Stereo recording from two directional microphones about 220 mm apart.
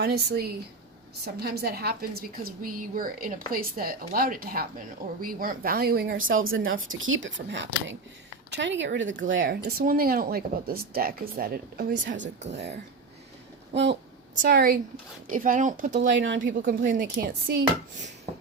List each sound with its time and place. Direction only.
0.0 s a woman's voice: 45° right (ahead or behind)
6.2 s speech: 65° right (ahead or behind)
12.2 s a woman's voice: 30° right (ahead or behind)
14.4 s a woman's voice: 40° right (ahead or behind)
16.0 s speech: 55° right (ahead or behind)
16.6 s a woman's voice: 35° right (ahead or behind)